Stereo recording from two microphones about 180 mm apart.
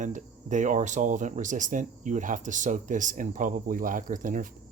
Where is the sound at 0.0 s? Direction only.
45° right (ahead or behind).